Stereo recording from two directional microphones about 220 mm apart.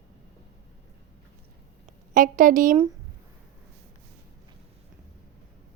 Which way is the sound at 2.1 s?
35° right (ahead or behind).